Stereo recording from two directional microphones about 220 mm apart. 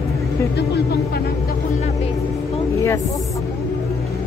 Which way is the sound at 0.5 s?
50° left (ahead or behind).